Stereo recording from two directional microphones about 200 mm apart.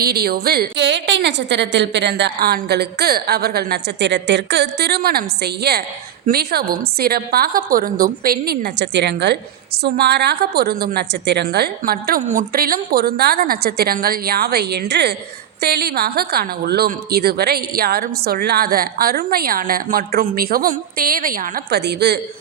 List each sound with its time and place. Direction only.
0.0 s speech: 50° right (ahead or behind)